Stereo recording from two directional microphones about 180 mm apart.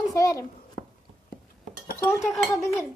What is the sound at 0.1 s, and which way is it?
Speech, 20° left (ahead or behind).